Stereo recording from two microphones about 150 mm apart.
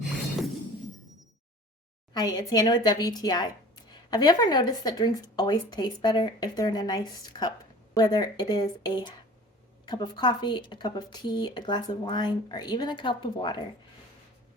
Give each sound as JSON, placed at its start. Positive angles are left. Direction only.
{"t": 2.1, "sound": "speech", "side_deg": 25}